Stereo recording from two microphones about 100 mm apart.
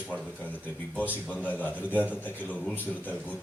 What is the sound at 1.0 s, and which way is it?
A man's voice, 15° left (ahead or behind).